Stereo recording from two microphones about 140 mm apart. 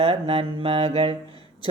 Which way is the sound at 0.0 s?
45° right (ahead or behind).